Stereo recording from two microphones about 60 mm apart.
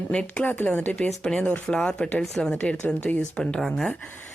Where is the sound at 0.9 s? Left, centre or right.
Centre.